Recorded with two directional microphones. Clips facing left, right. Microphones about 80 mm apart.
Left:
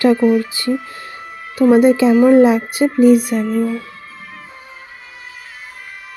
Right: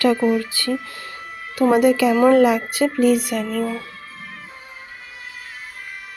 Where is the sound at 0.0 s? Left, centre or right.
Centre.